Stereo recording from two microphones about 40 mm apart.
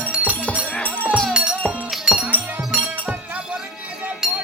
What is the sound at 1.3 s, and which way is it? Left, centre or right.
Music, right.